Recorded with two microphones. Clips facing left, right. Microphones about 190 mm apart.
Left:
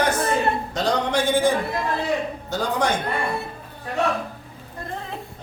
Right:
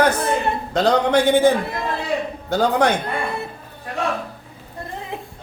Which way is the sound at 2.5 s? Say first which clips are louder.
Right 6 dB; 60° right (ahead or behind).